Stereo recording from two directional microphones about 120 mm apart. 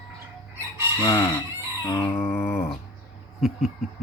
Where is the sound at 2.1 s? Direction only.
15° left (ahead or behind).